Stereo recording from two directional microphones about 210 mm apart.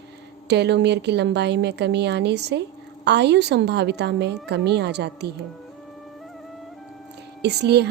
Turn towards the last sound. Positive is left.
turn(degrees=-50)  # may be behind; listen again after turning